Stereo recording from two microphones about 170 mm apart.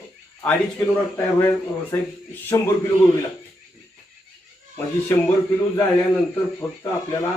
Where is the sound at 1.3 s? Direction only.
10° left (ahead or behind).